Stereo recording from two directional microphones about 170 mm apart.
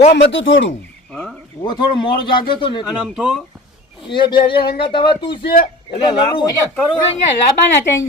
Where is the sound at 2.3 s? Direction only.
30° left (ahead or behind).